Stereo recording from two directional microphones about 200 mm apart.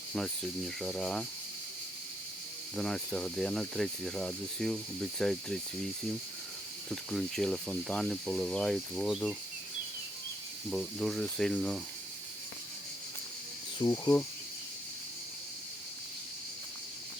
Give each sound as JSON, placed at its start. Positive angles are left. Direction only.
{"t": 0.8, "sound": "speech", "side_deg": 0}
{"t": 2.7, "sound": "speech", "side_deg": 0}
{"t": 6.9, "sound": "speech", "side_deg": 0}
{"t": 10.7, "sound": "speech", "side_deg": 0}
{"t": 13.8, "sound": "insect", "side_deg": 20}